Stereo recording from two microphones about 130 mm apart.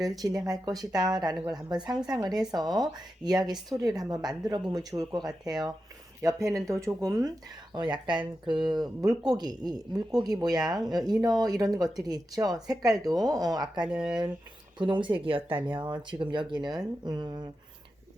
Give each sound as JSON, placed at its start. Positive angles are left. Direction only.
{"t": 0.0, "sound": "speech", "side_deg": -25}
{"t": 13.9, "sound": "speech", "side_deg": -5}
{"t": 14.8, "sound": "speech", "side_deg": -35}